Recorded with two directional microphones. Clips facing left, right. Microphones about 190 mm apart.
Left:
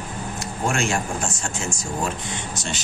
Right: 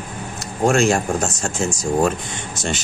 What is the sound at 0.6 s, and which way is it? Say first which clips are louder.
Speech: right 8 dB; 40° right (ahead or behind).